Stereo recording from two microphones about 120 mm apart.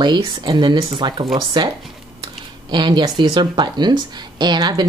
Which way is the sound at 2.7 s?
35° right (ahead or behind).